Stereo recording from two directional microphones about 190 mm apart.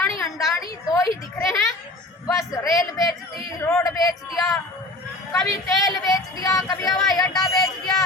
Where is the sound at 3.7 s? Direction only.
15° left (ahead or behind).